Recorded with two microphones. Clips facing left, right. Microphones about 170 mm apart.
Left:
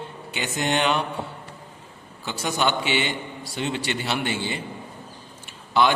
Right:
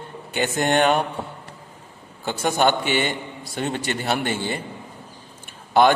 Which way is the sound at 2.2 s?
50° right (ahead or behind).